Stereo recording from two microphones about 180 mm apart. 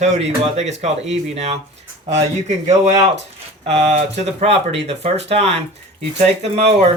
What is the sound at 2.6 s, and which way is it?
Speech, 40° right (ahead or behind).